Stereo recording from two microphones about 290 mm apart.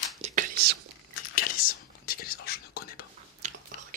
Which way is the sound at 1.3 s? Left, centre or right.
Left.